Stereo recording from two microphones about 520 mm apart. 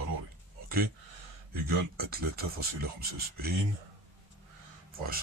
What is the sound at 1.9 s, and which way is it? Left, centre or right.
Speech, centre.